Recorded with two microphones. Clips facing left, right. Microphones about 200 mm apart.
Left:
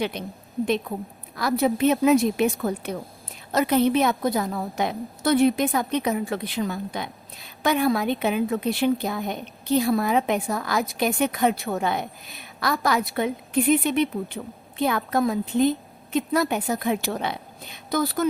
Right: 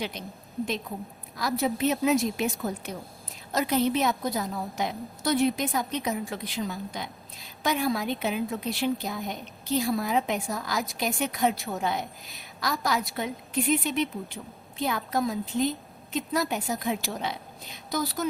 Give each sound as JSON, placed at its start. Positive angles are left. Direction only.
{"t": 0.0, "sound": "a woman's voice", "side_deg": 60}